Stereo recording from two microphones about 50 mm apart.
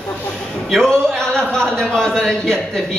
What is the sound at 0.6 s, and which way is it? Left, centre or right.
Speech, centre.